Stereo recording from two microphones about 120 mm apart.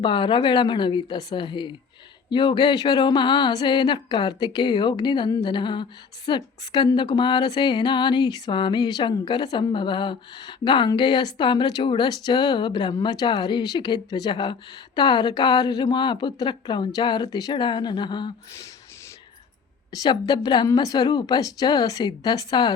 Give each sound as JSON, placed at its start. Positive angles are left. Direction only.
{"t": 0.0, "sound": "speech", "side_deg": 45}
{"t": 19.9, "sound": "speech", "side_deg": 30}